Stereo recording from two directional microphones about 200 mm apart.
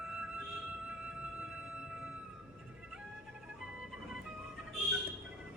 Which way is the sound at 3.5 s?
Centre (ahead or behind).